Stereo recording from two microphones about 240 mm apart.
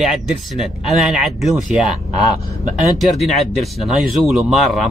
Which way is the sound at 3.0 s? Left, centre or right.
Centre.